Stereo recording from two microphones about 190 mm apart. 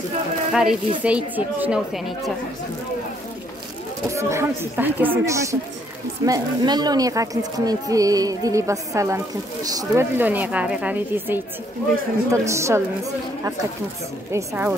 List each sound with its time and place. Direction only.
0.5 s speech: 5° right (ahead or behind)
4.1 s speech: 15° right (ahead or behind)
14.3 s speech: 15° right (ahead or behind)